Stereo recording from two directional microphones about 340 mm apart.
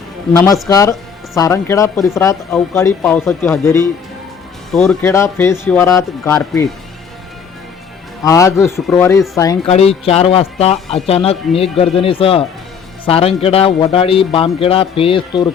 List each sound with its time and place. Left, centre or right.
0.3 s speech: centre
8.2 s speech: centre